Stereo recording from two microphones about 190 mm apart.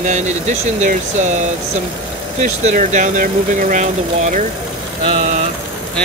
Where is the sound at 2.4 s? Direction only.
40° right (ahead or behind).